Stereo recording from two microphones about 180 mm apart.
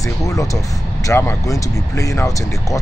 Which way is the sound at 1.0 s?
15° left (ahead or behind).